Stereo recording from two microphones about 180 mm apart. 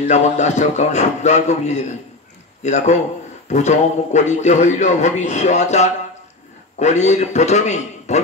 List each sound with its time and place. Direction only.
0.0 s a man's voice: 40° left (ahead or behind)